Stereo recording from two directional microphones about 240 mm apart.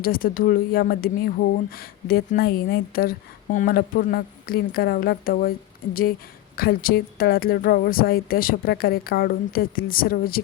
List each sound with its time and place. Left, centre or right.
0.0 s a woman's voice: left